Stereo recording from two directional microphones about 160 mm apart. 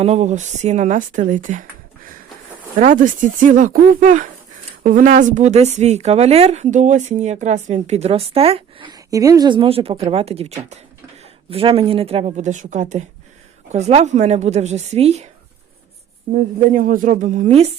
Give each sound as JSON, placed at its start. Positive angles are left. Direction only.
{"t": 0.0, "sound": "speech", "side_deg": -45}
{"t": 2.7, "sound": "speech", "side_deg": -55}
{"t": 8.9, "sound": "speech", "side_deg": -20}
{"t": 16.7, "sound": "speech", "side_deg": -55}